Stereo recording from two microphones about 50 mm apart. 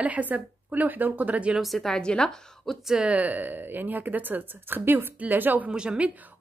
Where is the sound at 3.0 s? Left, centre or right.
Right.